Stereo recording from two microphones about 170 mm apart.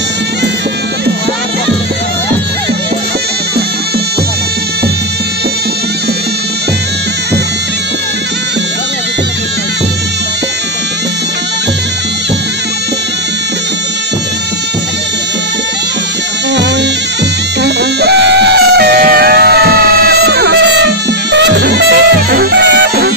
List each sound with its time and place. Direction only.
17.6 s music: 80° right